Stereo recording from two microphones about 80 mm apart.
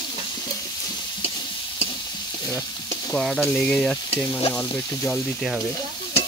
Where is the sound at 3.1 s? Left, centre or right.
Centre.